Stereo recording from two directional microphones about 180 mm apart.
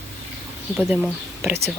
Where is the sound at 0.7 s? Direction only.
5° right (ahead or behind).